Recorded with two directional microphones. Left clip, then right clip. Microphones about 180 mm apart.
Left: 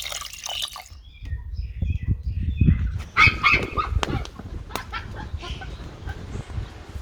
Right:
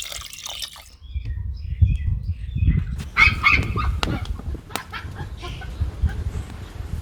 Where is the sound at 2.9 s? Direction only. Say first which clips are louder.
Right 2 dB; 40° right (ahead or behind).